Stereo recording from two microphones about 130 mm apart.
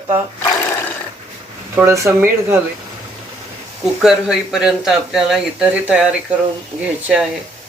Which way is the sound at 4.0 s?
5° right (ahead or behind).